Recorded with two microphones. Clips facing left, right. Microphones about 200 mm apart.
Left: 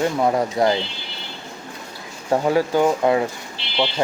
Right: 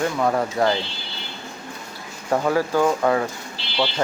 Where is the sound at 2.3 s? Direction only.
20° left (ahead or behind).